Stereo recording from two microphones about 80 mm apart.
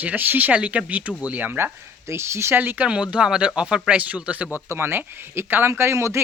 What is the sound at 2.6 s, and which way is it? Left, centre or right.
Speech, right.